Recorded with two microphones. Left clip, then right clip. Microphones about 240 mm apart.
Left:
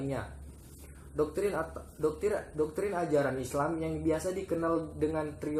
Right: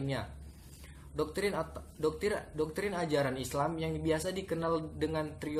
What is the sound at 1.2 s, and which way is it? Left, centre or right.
Speech, right.